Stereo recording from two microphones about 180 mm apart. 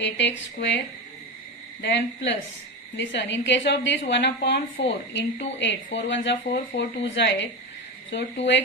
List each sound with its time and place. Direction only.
0.0 s a woman's voice: 80° left
1.8 s a woman's voice: 75° left (ahead or behind)
3.0 s a woman's voice: 85° left